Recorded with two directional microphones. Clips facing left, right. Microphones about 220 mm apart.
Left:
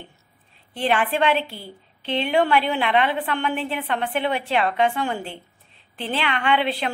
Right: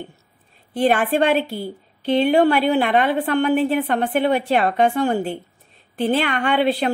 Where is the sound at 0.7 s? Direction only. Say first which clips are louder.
Right 5 dB; 45° right (ahead or behind).